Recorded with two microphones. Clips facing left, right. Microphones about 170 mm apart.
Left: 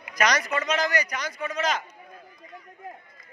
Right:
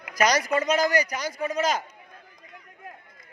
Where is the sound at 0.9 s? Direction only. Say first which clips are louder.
Right 3 dB; 35° right (ahead or behind).